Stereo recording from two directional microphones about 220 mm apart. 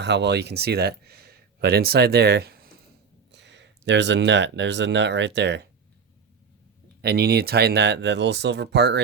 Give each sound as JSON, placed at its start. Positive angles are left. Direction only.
{"t": 0.0, "sound": "speech", "side_deg": -50}
{"t": 7.0, "sound": "speech", "side_deg": -45}